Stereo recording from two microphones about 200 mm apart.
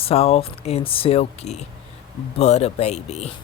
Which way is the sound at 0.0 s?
30° left (ahead or behind).